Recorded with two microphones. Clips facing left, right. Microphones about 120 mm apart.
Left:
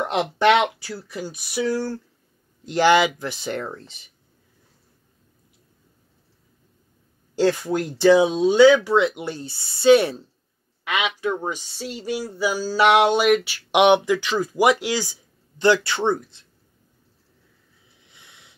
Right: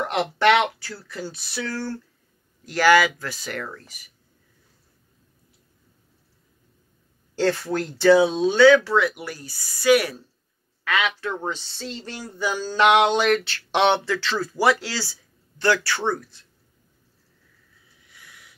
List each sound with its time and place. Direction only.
0.0 s speech: 15° left (ahead or behind)
7.3 s speech: 15° left (ahead or behind)
18.0 s a sound: 25° left (ahead or behind)